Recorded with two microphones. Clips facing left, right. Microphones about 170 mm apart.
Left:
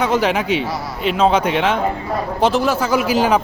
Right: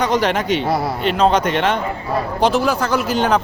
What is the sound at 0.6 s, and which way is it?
Speech, 55° right (ahead or behind).